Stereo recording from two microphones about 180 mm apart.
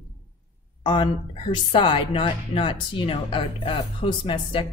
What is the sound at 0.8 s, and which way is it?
A woman's voice, 25° left (ahead or behind).